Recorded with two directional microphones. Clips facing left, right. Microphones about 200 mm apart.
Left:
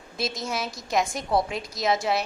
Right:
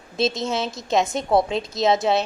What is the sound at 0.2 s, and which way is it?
A woman's voice, 25° right (ahead or behind).